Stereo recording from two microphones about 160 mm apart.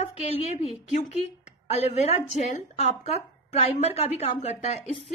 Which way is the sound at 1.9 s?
45° left (ahead or behind).